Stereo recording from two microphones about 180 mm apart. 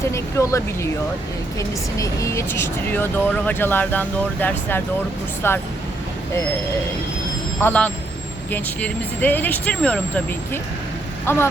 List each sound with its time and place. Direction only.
0.0 s speech: 15° left (ahead or behind)
7.6 s speech: 10° left (ahead or behind)